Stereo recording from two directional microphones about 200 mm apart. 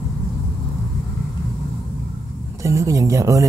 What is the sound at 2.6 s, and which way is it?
Speech, 15° right (ahead or behind).